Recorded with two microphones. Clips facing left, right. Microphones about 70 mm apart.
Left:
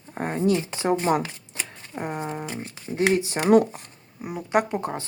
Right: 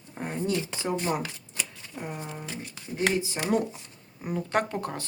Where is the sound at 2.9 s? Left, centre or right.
Left.